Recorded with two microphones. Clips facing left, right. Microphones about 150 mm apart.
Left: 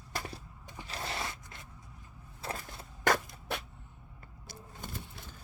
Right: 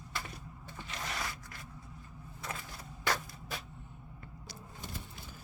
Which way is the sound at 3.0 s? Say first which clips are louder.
Left 6 dB; 50° left (ahead or behind).